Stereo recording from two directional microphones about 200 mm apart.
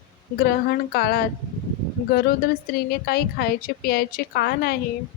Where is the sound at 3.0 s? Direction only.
50° left (ahead or behind).